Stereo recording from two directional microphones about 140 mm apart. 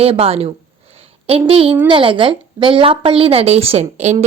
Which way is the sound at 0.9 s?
40° right (ahead or behind).